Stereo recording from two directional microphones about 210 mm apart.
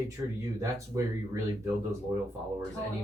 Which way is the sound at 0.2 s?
15° right (ahead or behind).